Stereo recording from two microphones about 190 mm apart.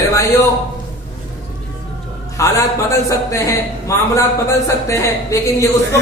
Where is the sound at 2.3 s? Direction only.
15° left (ahead or behind).